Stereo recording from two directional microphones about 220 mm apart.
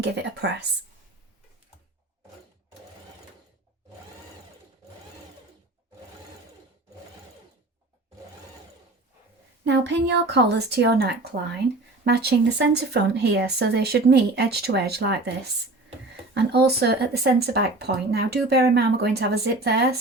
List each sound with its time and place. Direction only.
0.0 s speech: 50° right (ahead or behind)
9.6 s speech: 50° right (ahead or behind)
16.3 s speech: 50° right (ahead or behind)